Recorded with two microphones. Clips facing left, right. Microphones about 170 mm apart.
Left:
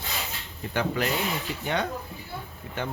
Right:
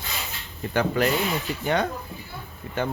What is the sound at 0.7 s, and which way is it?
Speech, 45° right (ahead or behind).